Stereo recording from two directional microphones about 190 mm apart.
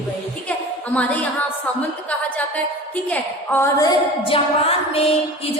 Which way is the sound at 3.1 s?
10° left (ahead or behind).